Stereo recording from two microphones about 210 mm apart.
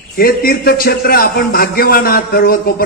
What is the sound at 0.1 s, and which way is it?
A man's voice, 45° left (ahead or behind).